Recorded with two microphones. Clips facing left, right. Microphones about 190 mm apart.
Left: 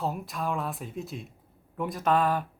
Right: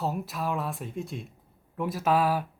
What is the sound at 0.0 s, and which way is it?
Speech, centre (ahead or behind).